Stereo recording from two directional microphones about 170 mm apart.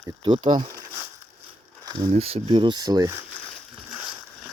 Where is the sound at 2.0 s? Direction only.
35° right (ahead or behind).